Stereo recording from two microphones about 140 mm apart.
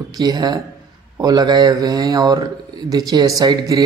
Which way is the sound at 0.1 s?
30° right (ahead or behind).